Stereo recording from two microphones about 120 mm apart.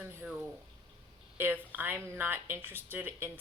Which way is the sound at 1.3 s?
15° right (ahead or behind).